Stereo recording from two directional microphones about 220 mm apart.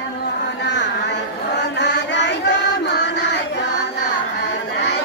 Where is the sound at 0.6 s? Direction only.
50° left (ahead or behind).